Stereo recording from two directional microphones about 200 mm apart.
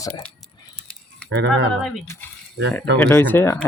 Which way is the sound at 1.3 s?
55° right (ahead or behind).